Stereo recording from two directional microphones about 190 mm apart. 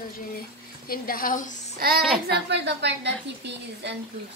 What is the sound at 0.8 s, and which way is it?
Speech, 50° left (ahead or behind).